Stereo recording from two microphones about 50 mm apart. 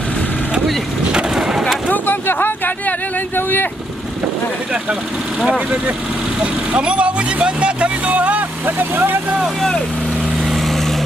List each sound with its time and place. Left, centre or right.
1.3 s skateboard: centre
1.9 s speech: left
6.4 s vehicle: right
8.6 s speech: right
9.6 s speech: centre